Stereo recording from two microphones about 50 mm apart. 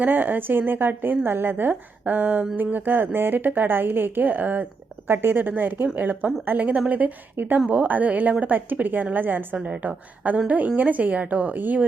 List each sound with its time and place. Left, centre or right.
0.0 s a woman's voice: right
5.0 s a woman's voice: right
9.8 s a woman's voice: right